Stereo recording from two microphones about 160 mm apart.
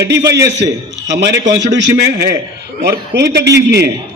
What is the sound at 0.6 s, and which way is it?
A man's voice, 90° right.